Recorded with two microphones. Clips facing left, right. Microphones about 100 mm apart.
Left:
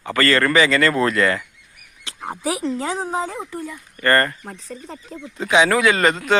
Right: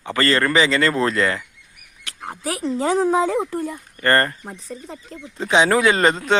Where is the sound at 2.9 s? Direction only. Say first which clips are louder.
Right 7 dB; 90° right.